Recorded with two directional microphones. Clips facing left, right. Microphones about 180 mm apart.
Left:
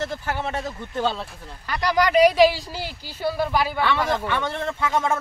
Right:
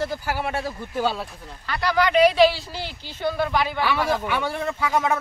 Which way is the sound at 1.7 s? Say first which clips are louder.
Left 1 dB; 15° left (ahead or behind).